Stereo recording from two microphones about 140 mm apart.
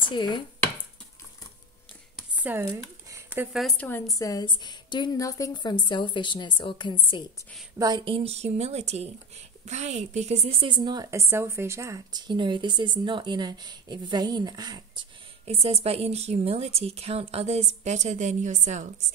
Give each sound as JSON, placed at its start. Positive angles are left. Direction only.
{"t": 0.0, "sound": "speech", "side_deg": 35}
{"t": 2.4, "sound": "a sound", "side_deg": -15}
{"t": 3.5, "sound": "speech", "side_deg": 0}
{"t": 4.1, "sound": "a woman's voice", "side_deg": 25}
{"t": 7.8, "sound": "a woman's voice", "side_deg": -35}
{"t": 11.1, "sound": "a woman's voice", "side_deg": -20}
{"t": 15.4, "sound": "a woman's voice", "side_deg": -45}